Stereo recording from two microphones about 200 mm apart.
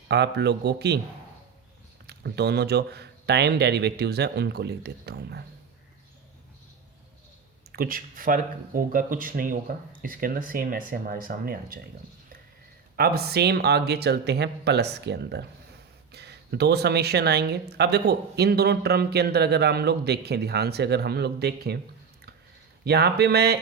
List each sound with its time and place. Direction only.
0.1 s speech: 55° right (ahead or behind)
2.0 s speech: 55° right (ahead or behind)
7.7 s speech: 45° right (ahead or behind)
13.0 s speech: 55° right (ahead or behind)
22.8 s speech: 55° right (ahead or behind)